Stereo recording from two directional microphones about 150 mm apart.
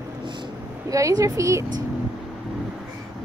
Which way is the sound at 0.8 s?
20° right (ahead or behind).